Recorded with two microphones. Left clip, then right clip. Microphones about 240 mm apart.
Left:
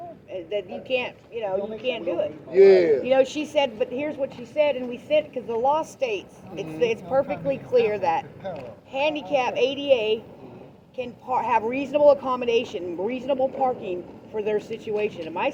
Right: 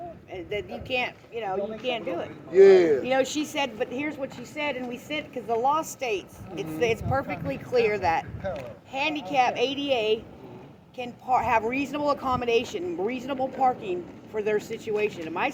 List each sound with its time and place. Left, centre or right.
0.3 s speech: right
8.4 s speech: right
8.9 s speech: right